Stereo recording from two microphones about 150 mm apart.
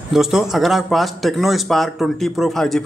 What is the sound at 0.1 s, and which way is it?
Speech, 5° right (ahead or behind).